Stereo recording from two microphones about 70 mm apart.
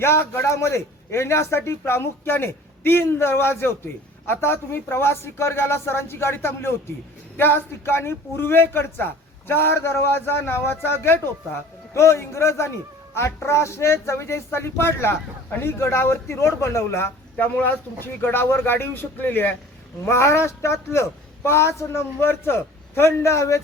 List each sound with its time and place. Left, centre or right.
0.0 s speech: left
17.3 s speech: left
20.1 s speech: left